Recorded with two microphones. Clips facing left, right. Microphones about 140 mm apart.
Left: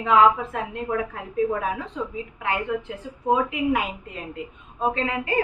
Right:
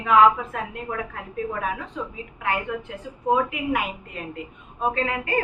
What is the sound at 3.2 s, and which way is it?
A woman's voice, 25° left (ahead or behind).